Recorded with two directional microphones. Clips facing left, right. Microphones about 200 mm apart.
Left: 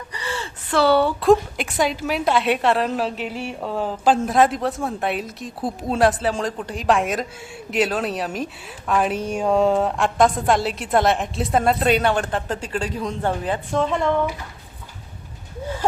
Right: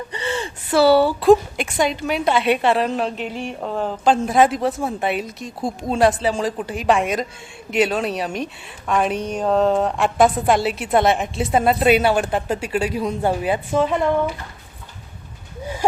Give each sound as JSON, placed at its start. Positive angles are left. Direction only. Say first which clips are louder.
{"t": 0.1, "sound": "gasp", "louder": "right 3 dB", "side_deg": -25}
{"t": 0.7, "sound": "a woman's voice", "louder": "right 3 dB", "side_deg": -5}
{"t": 15.6, "sound": "a sound", "louder": "right 2 dB", "side_deg": -15}